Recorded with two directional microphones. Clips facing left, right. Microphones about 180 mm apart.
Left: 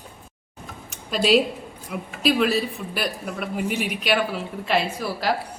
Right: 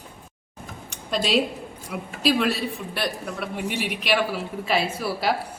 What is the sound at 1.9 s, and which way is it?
A woman's voice, centre (ahead or behind).